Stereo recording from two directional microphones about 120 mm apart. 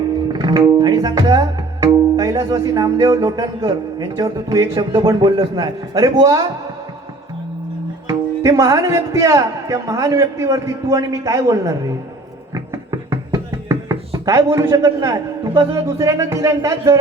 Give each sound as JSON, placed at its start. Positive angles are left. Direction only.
{"t": 0.3, "sound": "speech", "side_deg": -35}
{"t": 8.0, "sound": "speech", "side_deg": -25}
{"t": 12.5, "sound": "a sound", "side_deg": -30}